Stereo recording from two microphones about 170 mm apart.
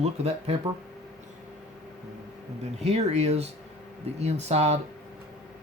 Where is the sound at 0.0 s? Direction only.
35° right (ahead or behind).